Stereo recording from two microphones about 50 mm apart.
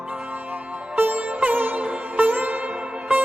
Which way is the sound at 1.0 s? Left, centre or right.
Right.